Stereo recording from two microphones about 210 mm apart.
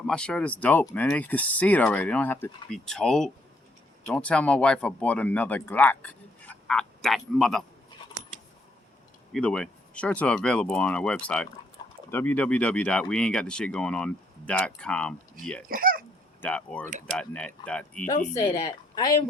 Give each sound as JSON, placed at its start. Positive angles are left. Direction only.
{"t": 0.1, "sound": "speech", "side_deg": 5}
{"t": 9.3, "sound": "speech", "side_deg": 5}
{"t": 15.7, "sound": "a sound", "side_deg": -45}
{"t": 16.4, "sound": "speech", "side_deg": 5}
{"t": 18.3, "sound": "speech", "side_deg": 15}